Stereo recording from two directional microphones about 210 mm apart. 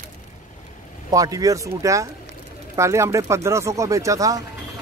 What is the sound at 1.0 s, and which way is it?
Speech, 15° right (ahead or behind).